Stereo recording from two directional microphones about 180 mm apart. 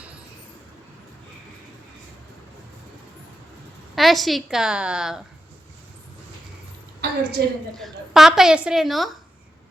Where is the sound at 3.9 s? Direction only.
Centre (ahead or behind).